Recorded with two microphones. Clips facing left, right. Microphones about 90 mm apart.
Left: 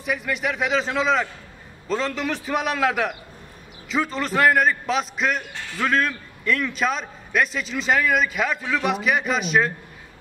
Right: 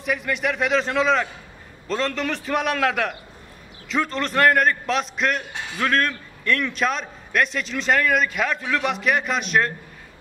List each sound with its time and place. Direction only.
0.0 s a man's voice: centre (ahead or behind)
5.5 s a sound: 20° right (ahead or behind)
5.8 s a man's voice: centre (ahead or behind)